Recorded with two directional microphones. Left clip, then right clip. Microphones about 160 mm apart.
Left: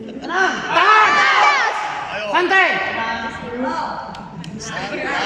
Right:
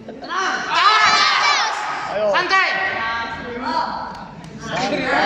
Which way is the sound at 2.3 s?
50° left (ahead or behind).